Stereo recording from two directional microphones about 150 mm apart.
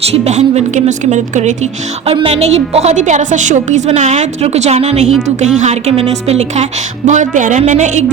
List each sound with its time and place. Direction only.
0.0 s a woman's voice: 45° right (ahead or behind)
2.0 s a woman's voice: 40° right (ahead or behind)